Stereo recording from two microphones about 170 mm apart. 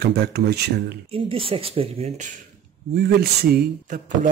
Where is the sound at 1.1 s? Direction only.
30° right (ahead or behind).